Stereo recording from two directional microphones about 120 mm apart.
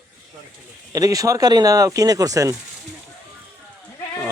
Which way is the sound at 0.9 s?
30° right (ahead or behind).